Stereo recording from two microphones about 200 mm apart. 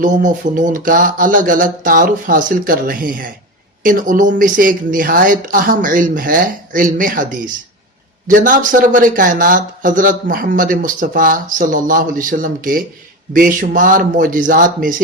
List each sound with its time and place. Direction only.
0.0 s speech: 40° right (ahead or behind)